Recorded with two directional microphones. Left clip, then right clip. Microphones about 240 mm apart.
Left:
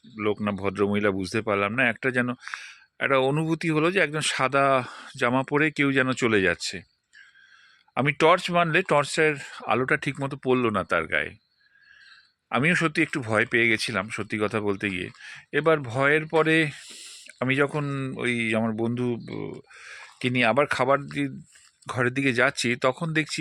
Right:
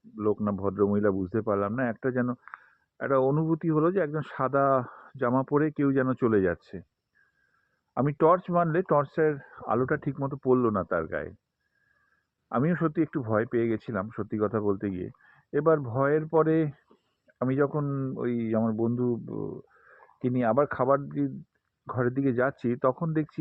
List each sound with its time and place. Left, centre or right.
0.2 s speech: left
7.9 s speech: left
12.5 s speech: left